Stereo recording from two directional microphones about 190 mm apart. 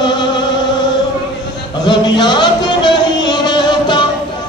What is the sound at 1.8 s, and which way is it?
Music, 25° left (ahead or behind).